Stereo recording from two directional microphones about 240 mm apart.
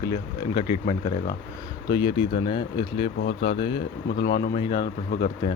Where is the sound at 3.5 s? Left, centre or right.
Left.